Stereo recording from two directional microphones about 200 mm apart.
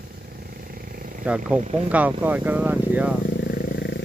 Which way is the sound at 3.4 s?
55° left (ahead or behind).